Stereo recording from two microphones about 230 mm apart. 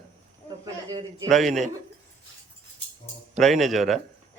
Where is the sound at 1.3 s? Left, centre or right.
Centre.